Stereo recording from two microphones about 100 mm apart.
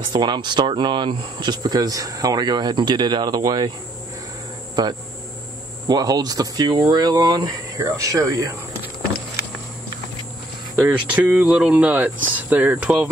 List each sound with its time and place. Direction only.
0.1 s speech: 50° right (ahead or behind)
5.9 s speech: 40° right (ahead or behind)
10.8 s speech: 15° right (ahead or behind)